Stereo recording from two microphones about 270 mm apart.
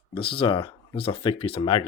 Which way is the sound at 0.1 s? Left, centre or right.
Centre.